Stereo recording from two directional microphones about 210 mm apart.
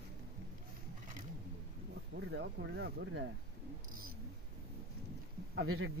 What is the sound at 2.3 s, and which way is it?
Speech, 55° right (ahead or behind).